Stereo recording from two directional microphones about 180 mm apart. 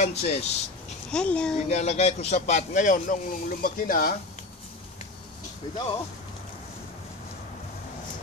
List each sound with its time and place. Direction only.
0.0 s a man's voice: 35° left (ahead or behind)
1.1 s a woman's voice: 5° left (ahead or behind)
1.7 s a man's voice: 40° left (ahead or behind)